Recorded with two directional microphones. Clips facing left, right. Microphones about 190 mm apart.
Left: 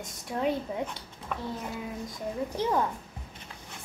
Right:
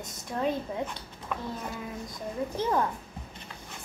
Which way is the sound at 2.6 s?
10° left (ahead or behind).